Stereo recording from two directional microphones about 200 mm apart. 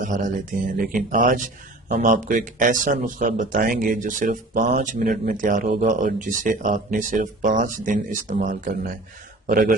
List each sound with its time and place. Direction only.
0.0 s speech: 40° right (ahead or behind)